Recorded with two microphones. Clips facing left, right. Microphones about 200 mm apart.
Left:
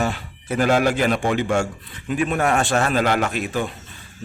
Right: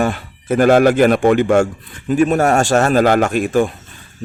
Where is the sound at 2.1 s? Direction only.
40° right (ahead or behind).